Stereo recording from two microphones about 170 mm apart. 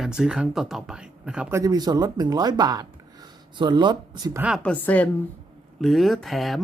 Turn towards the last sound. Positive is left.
turn(degrees=0)  # may be behind; listen again after turning